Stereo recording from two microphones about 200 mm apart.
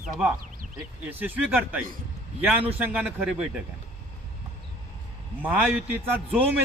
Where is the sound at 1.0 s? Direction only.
10° right (ahead or behind).